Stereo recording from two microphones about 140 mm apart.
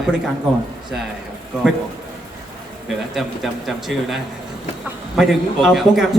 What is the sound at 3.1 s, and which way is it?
A man's voice, centre (ahead or behind).